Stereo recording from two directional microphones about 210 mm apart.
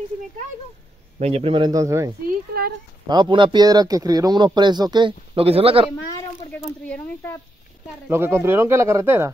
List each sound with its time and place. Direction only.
1.2 s a man's voice: 30° right (ahead or behind)
6.8 s speech: 10° left (ahead or behind)
8.1 s speech: 10° right (ahead or behind)